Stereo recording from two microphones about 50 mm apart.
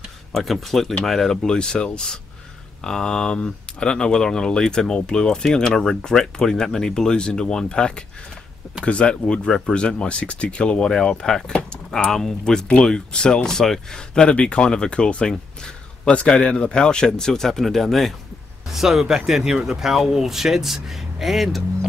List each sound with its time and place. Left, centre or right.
0.3 s speech: centre